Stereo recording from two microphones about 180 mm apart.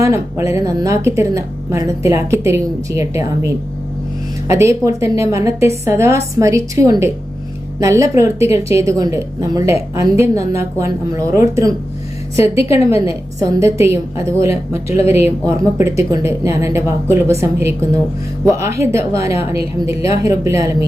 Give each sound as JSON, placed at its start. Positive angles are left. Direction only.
{"t": 0.0, "sound": "a woman's voice", "side_deg": -15}
{"t": 12.9, "sound": "a woman's voice", "side_deg": -15}